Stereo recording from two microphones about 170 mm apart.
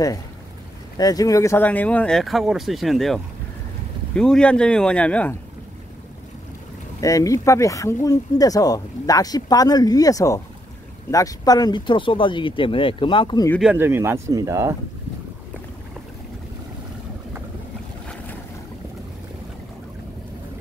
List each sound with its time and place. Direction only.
0.9 s speech: 20° left (ahead or behind)
7.0 s speech: 20° left (ahead or behind)
13.6 s speech: 10° right (ahead or behind)